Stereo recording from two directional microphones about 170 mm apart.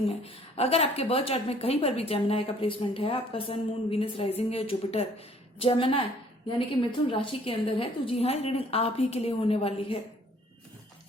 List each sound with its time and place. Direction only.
0.1 s a woman's voice: 35° left (ahead or behind)